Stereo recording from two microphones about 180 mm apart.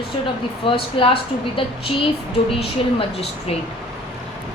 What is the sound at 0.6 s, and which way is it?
A woman's voice, 30° left (ahead or behind).